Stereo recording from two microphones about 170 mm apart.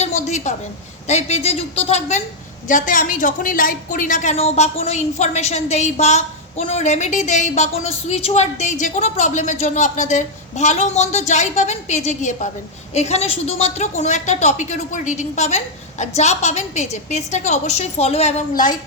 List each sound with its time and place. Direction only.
0.0 s a sound: 45° left (ahead or behind)
1.0 s a woman's voice: 40° left (ahead or behind)
2.6 s a woman's voice: 50° left (ahead or behind)